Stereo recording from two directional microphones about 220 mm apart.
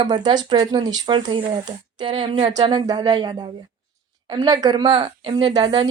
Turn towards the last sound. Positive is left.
turn(degrees=-20)  # may be behind; listen again after turning